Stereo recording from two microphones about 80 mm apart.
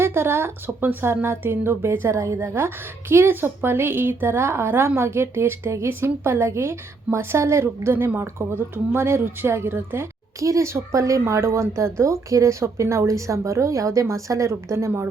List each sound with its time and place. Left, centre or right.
0.0 s a woman's voice: right